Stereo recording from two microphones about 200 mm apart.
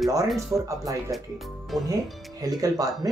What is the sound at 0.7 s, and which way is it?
Speech, 15° right (ahead or behind).